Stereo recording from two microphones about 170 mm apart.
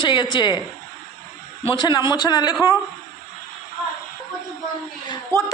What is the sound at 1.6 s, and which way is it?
Speech, 25° left (ahead or behind).